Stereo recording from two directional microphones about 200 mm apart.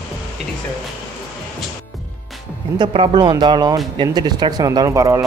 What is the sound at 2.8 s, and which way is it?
Speech, 20° right (ahead or behind).